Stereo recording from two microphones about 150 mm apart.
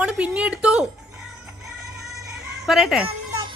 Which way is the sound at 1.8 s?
Centre (ahead or behind).